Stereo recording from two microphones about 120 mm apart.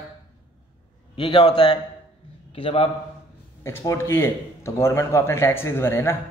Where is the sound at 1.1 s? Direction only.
45° left (ahead or behind).